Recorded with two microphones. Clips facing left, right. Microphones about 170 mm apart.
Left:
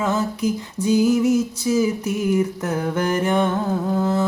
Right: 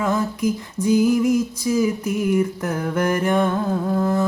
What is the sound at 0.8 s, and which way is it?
Music, 20° left (ahead or behind).